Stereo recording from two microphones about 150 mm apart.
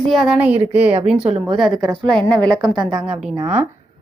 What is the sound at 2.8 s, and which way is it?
Speech, 30° right (ahead or behind).